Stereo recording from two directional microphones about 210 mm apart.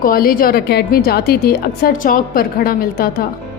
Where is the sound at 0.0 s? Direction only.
45° left (ahead or behind).